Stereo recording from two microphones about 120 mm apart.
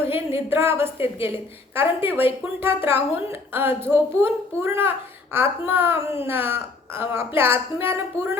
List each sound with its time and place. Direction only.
0.1 s speech: 20° right (ahead or behind)